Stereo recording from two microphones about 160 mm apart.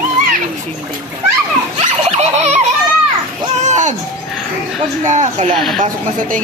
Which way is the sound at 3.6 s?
45° right (ahead or behind).